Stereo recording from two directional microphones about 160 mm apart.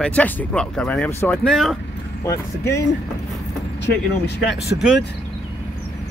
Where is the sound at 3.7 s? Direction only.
90° left.